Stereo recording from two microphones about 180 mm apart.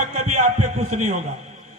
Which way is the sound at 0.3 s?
40° right (ahead or behind).